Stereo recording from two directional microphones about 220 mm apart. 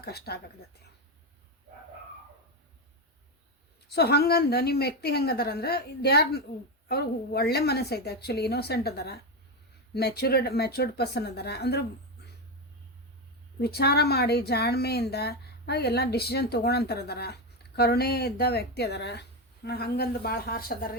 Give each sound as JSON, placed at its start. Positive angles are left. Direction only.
{"t": 0.0, "sound": "speech", "side_deg": 45}
{"t": 3.9, "sound": "speech", "side_deg": 45}
{"t": 13.6, "sound": "speech", "side_deg": 45}